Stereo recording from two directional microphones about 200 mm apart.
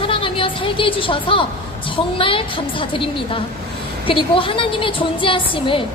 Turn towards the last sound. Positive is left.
turn(degrees=25)  # may be behind; listen again after turning